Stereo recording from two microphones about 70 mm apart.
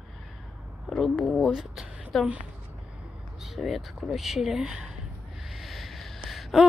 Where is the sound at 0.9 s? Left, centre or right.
Centre.